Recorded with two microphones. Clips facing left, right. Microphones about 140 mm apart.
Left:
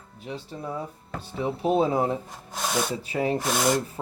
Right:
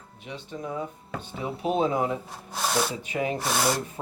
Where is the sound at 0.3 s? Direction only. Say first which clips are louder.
Left 1 dB; 35° left (ahead or behind).